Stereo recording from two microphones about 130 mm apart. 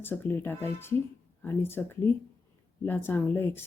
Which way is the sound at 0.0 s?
15° left (ahead or behind).